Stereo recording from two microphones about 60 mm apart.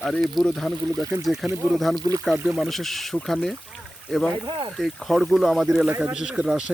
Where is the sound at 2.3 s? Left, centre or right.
Right.